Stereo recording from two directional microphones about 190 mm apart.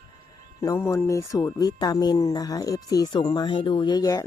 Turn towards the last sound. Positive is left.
turn(degrees=20)  # may be behind; listen again after turning